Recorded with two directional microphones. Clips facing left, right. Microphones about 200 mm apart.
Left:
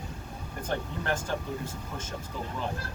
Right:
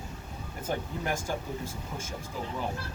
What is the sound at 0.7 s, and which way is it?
Speech, 10° right (ahead or behind).